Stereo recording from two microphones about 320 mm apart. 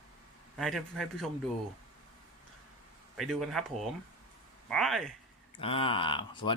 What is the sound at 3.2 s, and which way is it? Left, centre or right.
A man's voice, centre.